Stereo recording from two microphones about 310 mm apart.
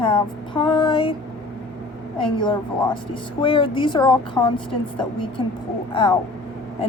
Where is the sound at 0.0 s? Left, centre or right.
Centre.